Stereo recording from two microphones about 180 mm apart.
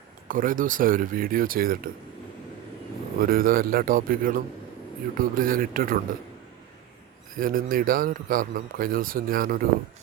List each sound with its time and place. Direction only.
0.3 s a man's voice: 50° right (ahead or behind)
3.2 s a man's voice: 55° right (ahead or behind)
7.3 s a man's voice: 50° right (ahead or behind)